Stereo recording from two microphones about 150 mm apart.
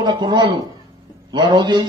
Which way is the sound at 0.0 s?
30° right (ahead or behind).